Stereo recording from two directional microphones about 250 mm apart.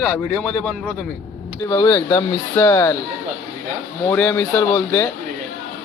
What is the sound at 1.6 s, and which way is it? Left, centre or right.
Speech, centre.